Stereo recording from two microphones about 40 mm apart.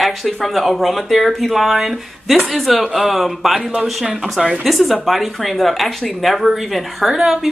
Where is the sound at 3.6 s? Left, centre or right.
Right.